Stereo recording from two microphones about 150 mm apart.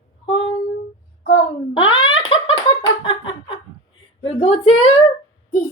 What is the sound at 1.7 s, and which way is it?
Giggle, 35° left (ahead or behind).